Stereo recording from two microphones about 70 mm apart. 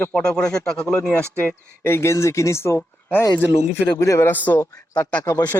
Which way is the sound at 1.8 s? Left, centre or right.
Left.